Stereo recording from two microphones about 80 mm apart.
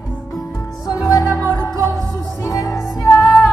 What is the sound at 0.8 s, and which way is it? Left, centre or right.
Music, left.